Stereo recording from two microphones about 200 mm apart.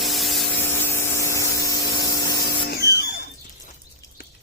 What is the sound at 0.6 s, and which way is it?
Spray, 10° left (ahead or behind).